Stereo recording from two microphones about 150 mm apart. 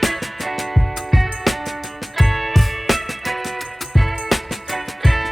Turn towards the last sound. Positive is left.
turn(degrees=0)  # may be behind; listen again after turning